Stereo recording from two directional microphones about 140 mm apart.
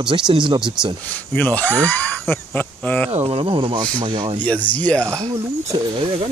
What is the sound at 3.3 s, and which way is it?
Speech, 40° right (ahead or behind).